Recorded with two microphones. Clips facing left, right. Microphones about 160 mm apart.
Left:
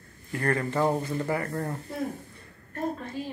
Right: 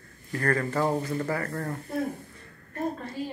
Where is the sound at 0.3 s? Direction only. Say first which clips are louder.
Even; 25° left (ahead or behind).